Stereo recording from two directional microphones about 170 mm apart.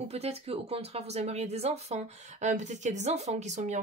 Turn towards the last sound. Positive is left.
turn(degrees=-45)  # may be behind; listen again after turning